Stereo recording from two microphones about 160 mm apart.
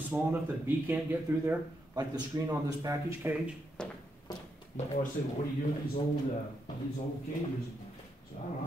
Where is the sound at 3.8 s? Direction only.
5° left (ahead or behind).